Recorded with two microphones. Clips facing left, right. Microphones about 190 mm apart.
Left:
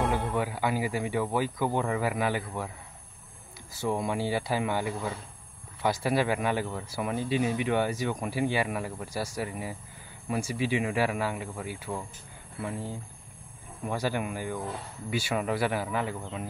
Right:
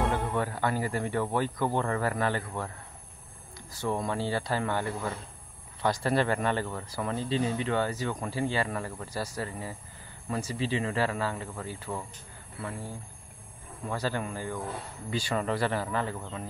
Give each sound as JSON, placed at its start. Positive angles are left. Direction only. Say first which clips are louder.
{"t": 0.1, "sound": "speech", "louder": "left 1 dB", "side_deg": 5}
{"t": 3.7, "sound": "speech", "louder": "left 1 dB", "side_deg": 10}
{"t": 12.5, "sound": "speech", "louder": "left 3 dB", "side_deg": 20}